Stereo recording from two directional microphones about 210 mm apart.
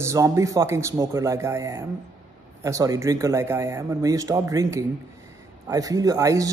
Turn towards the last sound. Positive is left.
turn(degrees=-15)  # may be behind; listen again after turning